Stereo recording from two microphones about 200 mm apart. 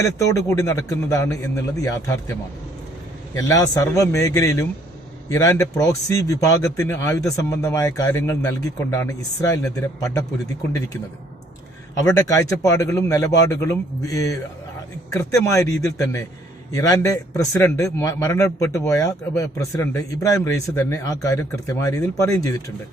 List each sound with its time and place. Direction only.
0.3 s a man's voice: 15° left (ahead or behind)
12.0 s a man's voice: 15° left (ahead or behind)